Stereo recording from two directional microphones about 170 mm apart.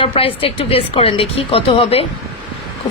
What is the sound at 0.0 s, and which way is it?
Speech, 35° left (ahead or behind).